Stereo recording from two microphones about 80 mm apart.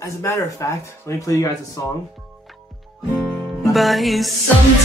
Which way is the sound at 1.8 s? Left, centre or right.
Left.